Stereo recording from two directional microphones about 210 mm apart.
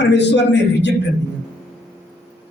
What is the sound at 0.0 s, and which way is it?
Speech, 55° left (ahead or behind).